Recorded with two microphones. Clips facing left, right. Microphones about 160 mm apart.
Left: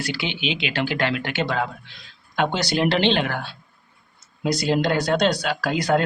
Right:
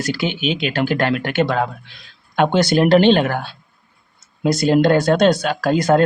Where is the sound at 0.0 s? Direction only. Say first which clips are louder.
Right 6 dB; 45° right (ahead or behind).